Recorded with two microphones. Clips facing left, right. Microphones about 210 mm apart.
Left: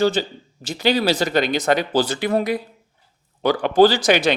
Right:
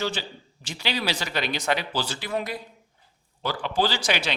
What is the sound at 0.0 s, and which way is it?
Speech, 40° left (ahead or behind).